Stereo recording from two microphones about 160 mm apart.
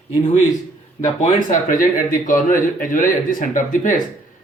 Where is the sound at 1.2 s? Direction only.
55° left (ahead or behind).